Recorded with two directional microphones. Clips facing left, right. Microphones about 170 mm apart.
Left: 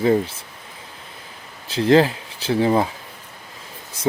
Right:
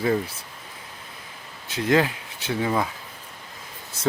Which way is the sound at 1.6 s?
30° left (ahead or behind).